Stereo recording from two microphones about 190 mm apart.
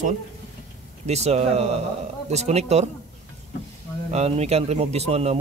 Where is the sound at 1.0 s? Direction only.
35° right (ahead or behind).